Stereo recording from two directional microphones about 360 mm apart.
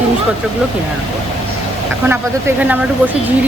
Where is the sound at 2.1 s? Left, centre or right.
Centre.